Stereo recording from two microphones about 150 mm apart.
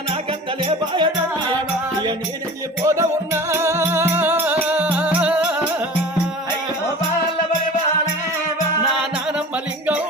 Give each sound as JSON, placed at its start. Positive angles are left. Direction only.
{"t": 2.8, "sound": "music", "side_deg": -20}